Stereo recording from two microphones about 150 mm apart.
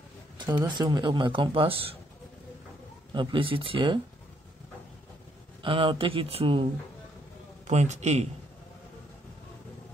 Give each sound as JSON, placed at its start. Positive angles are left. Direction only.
{"t": 0.7, "sound": "speech", "side_deg": -25}
{"t": 3.1, "sound": "speech", "side_deg": -30}
{"t": 5.6, "sound": "speech", "side_deg": -35}
{"t": 7.6, "sound": "a man's voice", "side_deg": -50}